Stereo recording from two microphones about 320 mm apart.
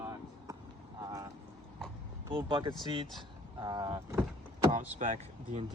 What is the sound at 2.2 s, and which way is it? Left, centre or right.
Speech, centre.